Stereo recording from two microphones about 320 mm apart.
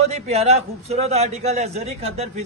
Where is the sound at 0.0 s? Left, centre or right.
Centre.